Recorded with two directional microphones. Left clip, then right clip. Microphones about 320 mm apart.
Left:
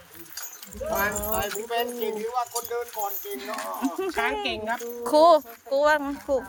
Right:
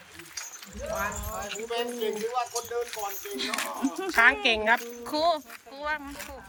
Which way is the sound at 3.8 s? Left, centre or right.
Left.